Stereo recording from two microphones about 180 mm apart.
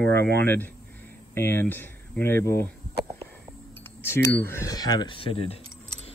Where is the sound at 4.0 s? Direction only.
15° left (ahead or behind).